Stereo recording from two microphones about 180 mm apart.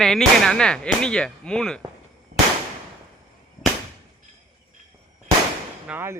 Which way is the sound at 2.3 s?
35° right (ahead or behind).